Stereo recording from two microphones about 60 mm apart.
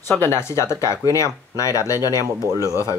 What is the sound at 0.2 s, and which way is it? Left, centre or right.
Speech, left.